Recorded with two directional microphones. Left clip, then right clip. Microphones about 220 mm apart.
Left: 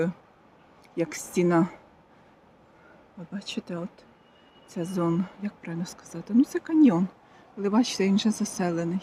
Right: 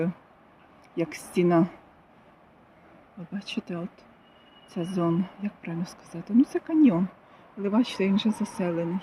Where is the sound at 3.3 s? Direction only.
Centre (ahead or behind).